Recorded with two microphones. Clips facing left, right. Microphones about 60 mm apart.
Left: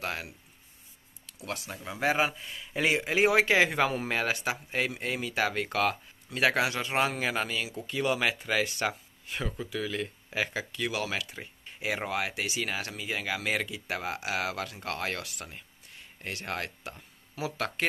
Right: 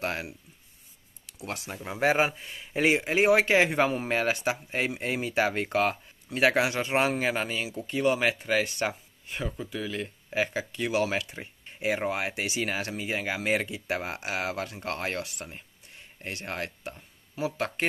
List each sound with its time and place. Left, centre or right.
1.7 s speech: right
3.2 s speech: centre
4.7 s speech: centre
7.9 s speech: centre
10.9 s speech: right
11.1 s speech: centre
16.2 s speech: centre
16.8 s a sound: centre
17.6 s speech: centre